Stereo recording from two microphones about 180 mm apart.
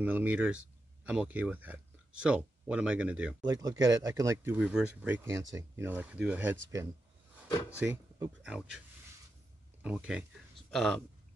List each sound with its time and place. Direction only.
0.0 s speech: 10° right (ahead or behind)
3.3 s speech: 20° right (ahead or behind)
4.6 s speech: 5° right (ahead or behind)
7.8 s speech: 5° right (ahead or behind)